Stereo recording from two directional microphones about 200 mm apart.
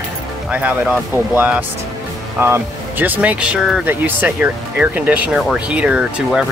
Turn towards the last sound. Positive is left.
turn(degrees=-5)  # may be behind; listen again after turning